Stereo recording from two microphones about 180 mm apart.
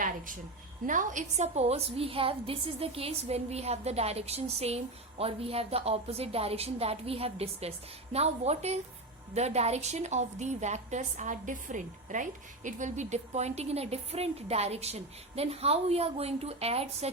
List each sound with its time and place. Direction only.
0.9 s a woman's voice: 45° right (ahead or behind)